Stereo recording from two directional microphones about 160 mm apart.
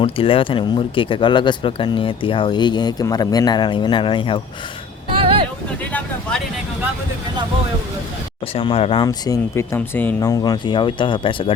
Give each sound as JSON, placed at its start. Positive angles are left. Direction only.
{"t": 0.0, "sound": "speech", "side_deg": 35}
{"t": 5.1, "sound": "vehicle", "side_deg": -35}
{"t": 5.8, "sound": "speech", "side_deg": 10}
{"t": 8.5, "sound": "speech", "side_deg": 35}
{"t": 9.0, "sound": "speech", "side_deg": 20}
{"t": 10.2, "sound": "speech", "side_deg": 20}